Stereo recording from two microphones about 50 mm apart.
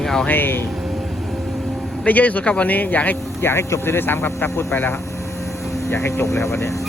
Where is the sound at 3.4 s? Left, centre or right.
Left.